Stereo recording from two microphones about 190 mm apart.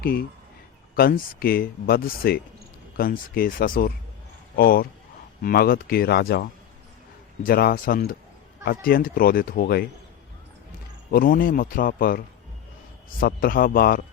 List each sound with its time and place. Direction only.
0.0 s speech: 50° left (ahead or behind)
11.1 s speech: 50° left (ahead or behind)